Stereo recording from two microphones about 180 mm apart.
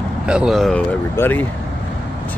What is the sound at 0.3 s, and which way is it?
Speech, 5° right (ahead or behind).